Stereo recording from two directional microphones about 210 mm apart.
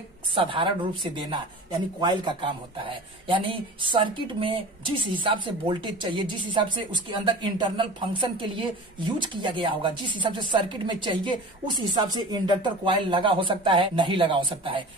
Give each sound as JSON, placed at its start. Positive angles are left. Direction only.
{"t": 0.3, "sound": "a man's voice", "side_deg": -25}